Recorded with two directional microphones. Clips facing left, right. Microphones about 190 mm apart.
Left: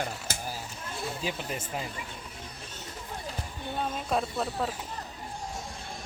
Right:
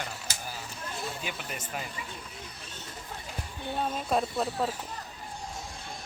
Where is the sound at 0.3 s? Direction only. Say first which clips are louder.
Left 4 dB; 50° left (ahead or behind).